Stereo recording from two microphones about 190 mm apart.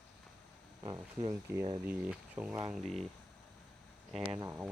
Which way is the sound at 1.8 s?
10° right (ahead or behind).